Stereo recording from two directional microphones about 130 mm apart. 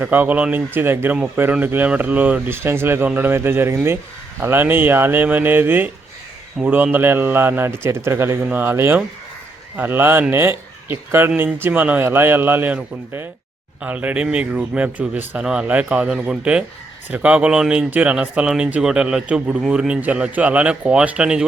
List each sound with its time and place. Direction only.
0.0 s speech: 15° right (ahead or behind)